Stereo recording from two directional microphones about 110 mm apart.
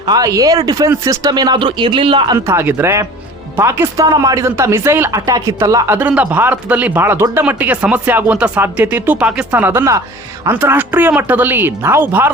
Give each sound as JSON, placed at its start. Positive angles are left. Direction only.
{"t": 0.0, "sound": "speech", "side_deg": -35}
{"t": 2.5, "sound": "speech", "side_deg": -20}
{"t": 4.0, "sound": "speech", "side_deg": -35}
{"t": 6.0, "sound": "speech", "side_deg": -15}